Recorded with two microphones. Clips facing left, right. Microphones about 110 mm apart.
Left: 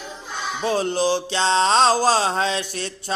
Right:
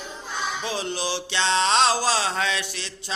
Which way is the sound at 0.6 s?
45° left (ahead or behind).